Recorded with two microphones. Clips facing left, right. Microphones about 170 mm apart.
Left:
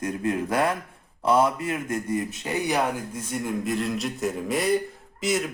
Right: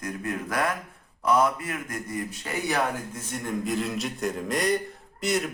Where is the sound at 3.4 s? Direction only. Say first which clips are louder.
Even; centre (ahead or behind).